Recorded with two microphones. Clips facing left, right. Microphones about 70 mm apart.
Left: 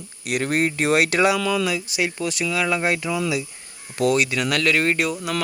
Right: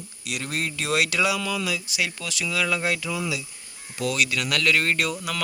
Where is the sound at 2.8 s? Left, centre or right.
Left.